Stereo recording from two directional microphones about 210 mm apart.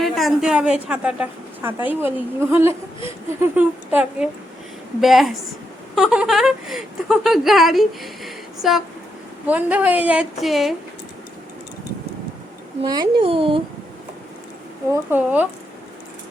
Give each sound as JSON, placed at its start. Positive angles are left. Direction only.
{"t": 0.0, "sound": "a woman's voice", "side_deg": 0}
{"t": 12.8, "sound": "a child's voice", "side_deg": -20}
{"t": 15.1, "sound": "a woman's voice", "side_deg": -10}